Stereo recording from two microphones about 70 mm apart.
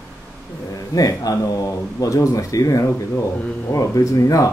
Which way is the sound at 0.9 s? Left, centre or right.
Left.